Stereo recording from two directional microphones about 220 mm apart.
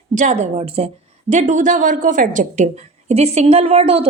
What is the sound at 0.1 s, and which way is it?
A woman's voice, 35° right (ahead or behind).